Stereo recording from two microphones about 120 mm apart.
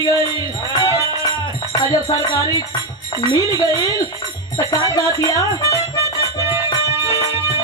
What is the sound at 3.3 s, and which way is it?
Speech, 30° left (ahead or behind).